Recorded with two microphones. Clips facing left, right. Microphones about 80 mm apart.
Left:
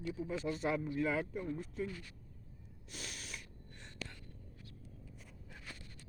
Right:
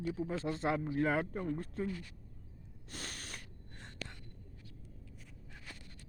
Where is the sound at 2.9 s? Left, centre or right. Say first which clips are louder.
Right 2 dB; right.